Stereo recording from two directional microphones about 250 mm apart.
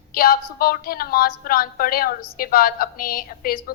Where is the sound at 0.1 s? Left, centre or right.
Left.